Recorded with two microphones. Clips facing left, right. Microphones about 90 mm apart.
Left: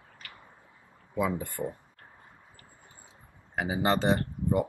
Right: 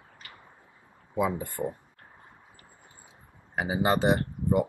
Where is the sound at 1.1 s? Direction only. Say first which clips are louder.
Right 2 dB; 20° right (ahead or behind).